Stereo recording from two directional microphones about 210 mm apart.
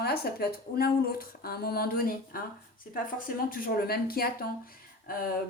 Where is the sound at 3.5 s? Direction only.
45° left (ahead or behind).